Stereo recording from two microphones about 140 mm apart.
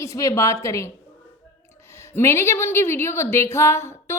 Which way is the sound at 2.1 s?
20° left (ahead or behind).